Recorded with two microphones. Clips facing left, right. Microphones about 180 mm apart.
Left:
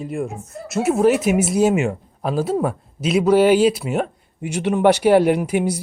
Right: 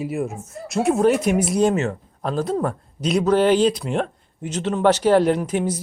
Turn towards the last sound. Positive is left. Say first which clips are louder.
# left 2 dB
turn(degrees=10)  # may be behind; listen again after turning